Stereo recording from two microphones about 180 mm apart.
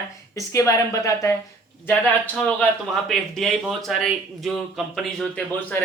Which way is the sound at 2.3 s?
5° left (ahead or behind).